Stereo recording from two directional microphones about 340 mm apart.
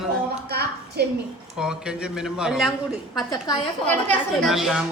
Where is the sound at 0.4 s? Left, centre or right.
Right.